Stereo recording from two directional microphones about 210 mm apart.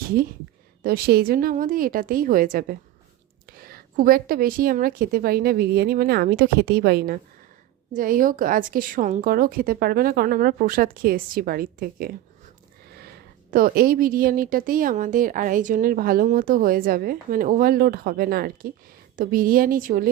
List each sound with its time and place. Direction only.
0.8 s speech: 45° right (ahead or behind)
13.5 s speech: 40° right (ahead or behind)